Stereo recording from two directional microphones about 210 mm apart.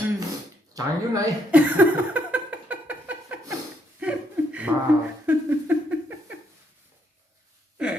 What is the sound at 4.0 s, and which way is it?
Chuckle, 5° right (ahead or behind).